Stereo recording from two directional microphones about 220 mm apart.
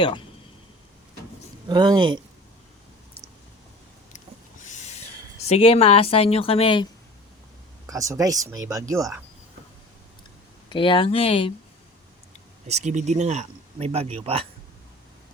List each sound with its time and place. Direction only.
1.6 s speech: 20° right (ahead or behind)
4.6 s a sound: 35° left (ahead or behind)
5.5 s a woman's voice: 25° left (ahead or behind)
7.9 s speech: 15° right (ahead or behind)
10.7 s a woman's voice: 25° left (ahead or behind)
12.6 s speech: 30° right (ahead or behind)